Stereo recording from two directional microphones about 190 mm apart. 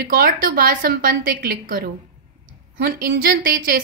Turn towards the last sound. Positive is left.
turn(degrees=-45)  # may be behind; listen again after turning